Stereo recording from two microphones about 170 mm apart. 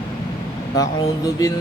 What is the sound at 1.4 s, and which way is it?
Speech, 20° left (ahead or behind).